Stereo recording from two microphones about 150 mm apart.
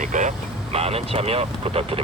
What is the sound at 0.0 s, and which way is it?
Speech, 55° right (ahead or behind).